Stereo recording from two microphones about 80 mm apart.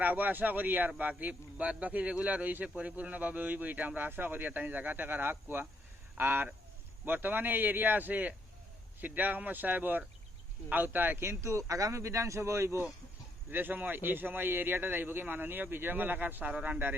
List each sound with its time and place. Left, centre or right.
0.0 s a man's voice: right